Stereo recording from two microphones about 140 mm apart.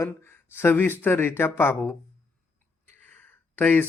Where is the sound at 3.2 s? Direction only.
15° left (ahead or behind).